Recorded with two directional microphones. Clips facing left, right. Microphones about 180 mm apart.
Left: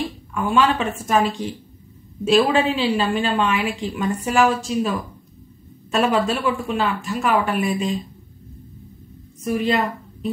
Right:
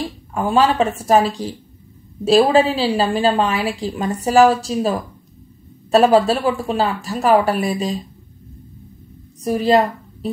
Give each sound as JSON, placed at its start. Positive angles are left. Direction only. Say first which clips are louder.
{"t": 0.0, "sound": "a woman's voice", "louder": "right 2 dB", "side_deg": -40}
{"t": 9.4, "sound": "a woman's voice", "louder": "right 5 dB", "side_deg": -35}